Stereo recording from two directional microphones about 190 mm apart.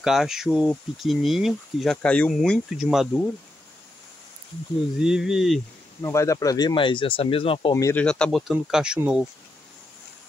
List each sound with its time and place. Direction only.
0.0 s speech: centre (ahead or behind)
4.9 s speech: centre (ahead or behind)
6.0 s speech: 15° left (ahead or behind)
7.7 s speech: 10° left (ahead or behind); by 9.2 s 5° right (ahead or behind)